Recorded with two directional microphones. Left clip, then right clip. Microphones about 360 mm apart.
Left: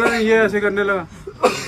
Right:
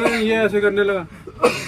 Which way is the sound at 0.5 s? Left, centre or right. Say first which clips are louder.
Right 1 dB; centre.